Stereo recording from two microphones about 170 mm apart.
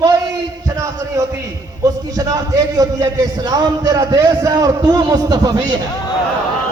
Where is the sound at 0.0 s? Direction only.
20° right (ahead or behind).